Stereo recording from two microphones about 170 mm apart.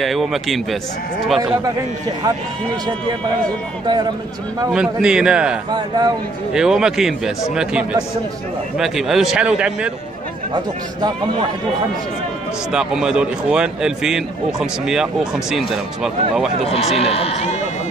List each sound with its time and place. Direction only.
0.0 s a man's voice: centre (ahead or behind)
1.4 s speech: 20° right (ahead or behind)
4.7 s a man's voice: 5° right (ahead or behind)
5.7 s speech: 25° right (ahead or behind)
6.5 s a man's voice: 5° right (ahead or behind)
8.7 s a man's voice: 5° right (ahead or behind)
10.5 s speech: 25° right (ahead or behind)
12.7 s a man's voice: 5° right (ahead or behind)
16.6 s speech: 35° left (ahead or behind)